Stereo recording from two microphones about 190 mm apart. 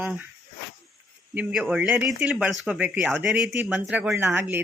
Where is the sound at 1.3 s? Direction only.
5° right (ahead or behind).